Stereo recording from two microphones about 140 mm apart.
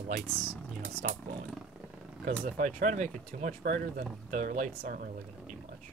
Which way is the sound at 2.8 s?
60° right (ahead or behind).